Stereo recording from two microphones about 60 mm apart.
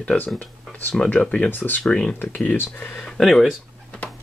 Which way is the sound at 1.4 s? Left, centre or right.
Left.